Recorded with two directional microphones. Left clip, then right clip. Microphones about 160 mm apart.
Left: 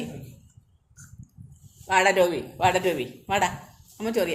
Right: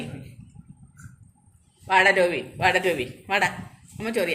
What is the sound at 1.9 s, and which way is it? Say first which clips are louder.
A man's voice: right 2 dB; 5° left (ahead or behind).